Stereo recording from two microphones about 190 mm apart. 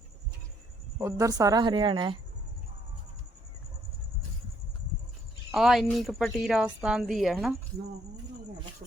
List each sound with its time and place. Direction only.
1.0 s a woman's voice: 15° right (ahead or behind)
5.5 s a woman's voice: centre (ahead or behind)